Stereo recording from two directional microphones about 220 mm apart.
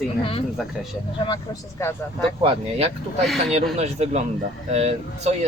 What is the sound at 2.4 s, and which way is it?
Speech, 25° right (ahead or behind).